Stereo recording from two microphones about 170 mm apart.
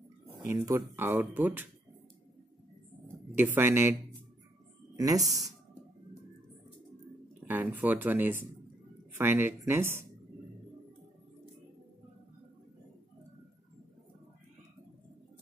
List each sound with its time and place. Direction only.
0.6 s speech: 20° right (ahead or behind)
3.3 s speech: 15° right (ahead or behind)
4.9 s speech: 20° right (ahead or behind)
7.4 s speech: 10° right (ahead or behind)